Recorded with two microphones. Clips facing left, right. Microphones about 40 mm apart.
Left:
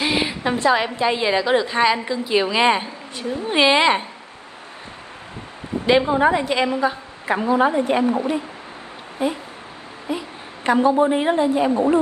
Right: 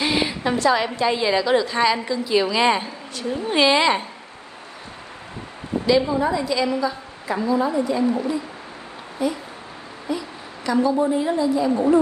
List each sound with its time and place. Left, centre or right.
0.0 s a sound: left
0.8 s a woman's voice: left
5.9 s a woman's voice: left
9.2 s a woman's voice: left